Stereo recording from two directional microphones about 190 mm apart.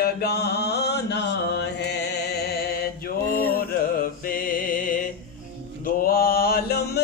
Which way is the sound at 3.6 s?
50° left (ahead or behind).